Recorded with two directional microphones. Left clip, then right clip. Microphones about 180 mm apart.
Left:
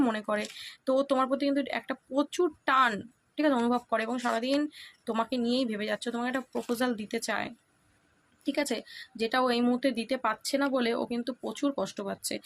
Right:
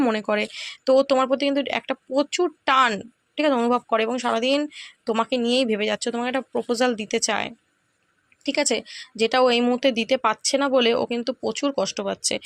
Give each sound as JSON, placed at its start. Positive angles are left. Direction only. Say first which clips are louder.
{"t": 0.0, "sound": "speech", "louder": "right 7 dB", "side_deg": -35}